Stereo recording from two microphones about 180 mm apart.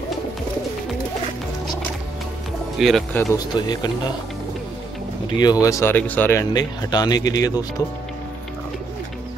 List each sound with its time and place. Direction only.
2.8 s speech: centre (ahead or behind)
3.2 s speech: 20° left (ahead or behind)
5.4 s speech: 20° left (ahead or behind)